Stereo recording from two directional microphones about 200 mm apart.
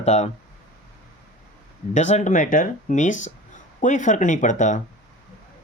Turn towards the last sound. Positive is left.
turn(degrees=40)  # may be behind; listen again after turning